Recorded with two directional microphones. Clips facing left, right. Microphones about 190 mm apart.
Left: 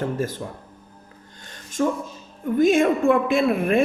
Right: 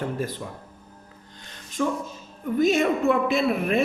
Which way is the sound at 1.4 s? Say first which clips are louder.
Left 3 dB; 50° left (ahead or behind).